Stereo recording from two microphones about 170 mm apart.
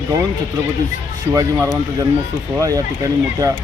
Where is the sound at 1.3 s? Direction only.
20° right (ahead or behind).